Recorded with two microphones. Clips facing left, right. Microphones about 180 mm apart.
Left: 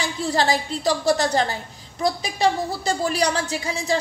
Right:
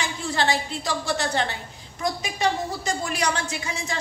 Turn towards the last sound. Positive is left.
turn(degrees=35)  # may be behind; listen again after turning